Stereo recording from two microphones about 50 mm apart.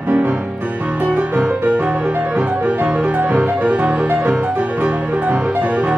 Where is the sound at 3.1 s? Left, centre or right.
Right.